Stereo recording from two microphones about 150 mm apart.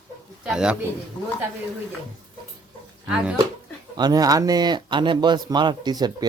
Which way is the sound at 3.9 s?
25° right (ahead or behind).